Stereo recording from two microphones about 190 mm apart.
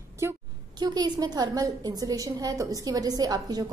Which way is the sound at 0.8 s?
20° right (ahead or behind).